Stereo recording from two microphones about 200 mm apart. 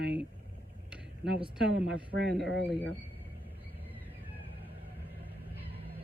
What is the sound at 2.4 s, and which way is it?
Speech, 60° left (ahead or behind).